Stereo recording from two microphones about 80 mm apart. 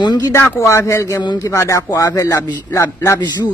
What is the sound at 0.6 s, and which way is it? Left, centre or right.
A man's voice, left.